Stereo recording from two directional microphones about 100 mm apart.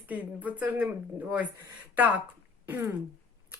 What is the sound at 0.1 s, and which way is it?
Speech, 15° right (ahead or behind).